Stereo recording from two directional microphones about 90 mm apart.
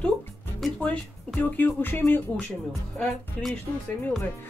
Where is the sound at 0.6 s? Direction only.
Centre (ahead or behind).